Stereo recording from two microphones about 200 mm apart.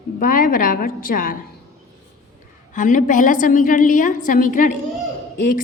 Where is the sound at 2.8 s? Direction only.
40° left (ahead or behind).